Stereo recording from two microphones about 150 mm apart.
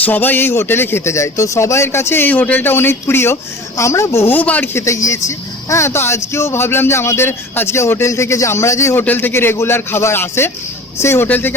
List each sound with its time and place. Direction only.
0.0 s a man's voice: 10° left (ahead or behind)